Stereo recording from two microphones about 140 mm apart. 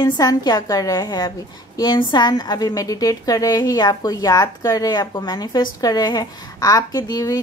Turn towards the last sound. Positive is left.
turn(degrees=25)  # may be behind; listen again after turning